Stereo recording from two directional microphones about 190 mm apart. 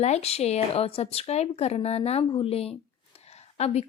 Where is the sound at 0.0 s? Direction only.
35° left (ahead or behind).